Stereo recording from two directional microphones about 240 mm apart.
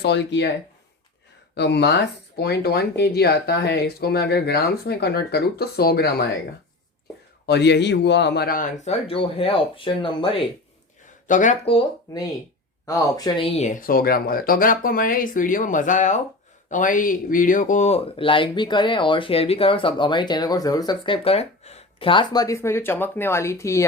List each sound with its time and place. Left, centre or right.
0.0 s speech: left
1.5 s speech: left
7.4 s speech: left
11.3 s speech: left; by 23.8 s centre